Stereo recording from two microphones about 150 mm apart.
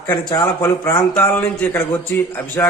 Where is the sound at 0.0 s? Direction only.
25° left (ahead or behind).